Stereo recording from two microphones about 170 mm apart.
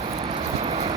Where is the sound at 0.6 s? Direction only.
35° right (ahead or behind).